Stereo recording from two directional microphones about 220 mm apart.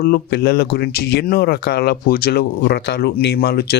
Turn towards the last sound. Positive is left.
turn(degrees=45)  # may be behind; listen again after turning